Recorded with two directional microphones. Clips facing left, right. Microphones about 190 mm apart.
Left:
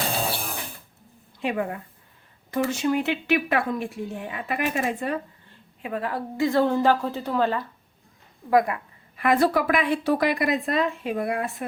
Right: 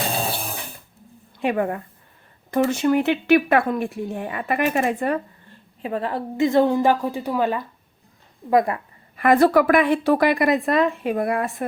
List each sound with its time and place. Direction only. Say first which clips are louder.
1.4 s a woman's voice: right 5 dB; 60° right (ahead or behind)
5.8 s a woman's voice: right 3 dB; 30° right (ahead or behind); by 7.6 s 15° right (ahead or behind)
8.4 s speech: right 2 dB; 30° right (ahead or behind)
9.1 s speech: right 5 dB; 50° right (ahead or behind)